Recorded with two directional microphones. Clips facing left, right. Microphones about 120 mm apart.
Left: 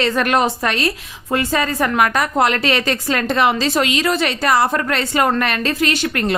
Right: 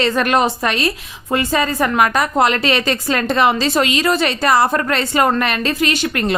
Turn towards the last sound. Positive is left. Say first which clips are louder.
# right 1 dB
turn(degrees=-20)  # may be behind; listen again after turning